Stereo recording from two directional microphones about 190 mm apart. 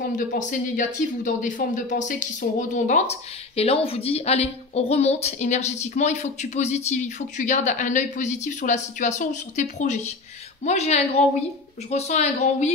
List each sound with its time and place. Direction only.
0.0 s a woman's voice: 40° left (ahead or behind)